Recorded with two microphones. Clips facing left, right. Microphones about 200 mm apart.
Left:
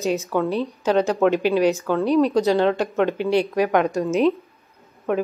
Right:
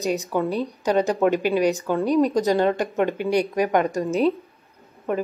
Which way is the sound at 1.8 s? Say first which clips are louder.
Left 1 dB; 15° right (ahead or behind).